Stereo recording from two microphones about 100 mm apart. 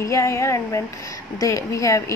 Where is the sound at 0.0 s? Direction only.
30° left (ahead or behind).